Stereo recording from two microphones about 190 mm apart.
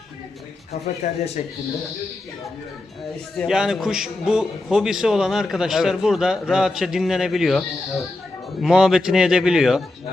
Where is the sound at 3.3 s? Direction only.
5° right (ahead or behind).